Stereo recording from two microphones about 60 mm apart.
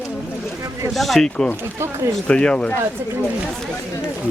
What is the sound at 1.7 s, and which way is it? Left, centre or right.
Speech, right.